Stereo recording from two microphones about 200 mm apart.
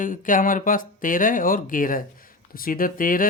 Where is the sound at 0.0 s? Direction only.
40° left (ahead or behind).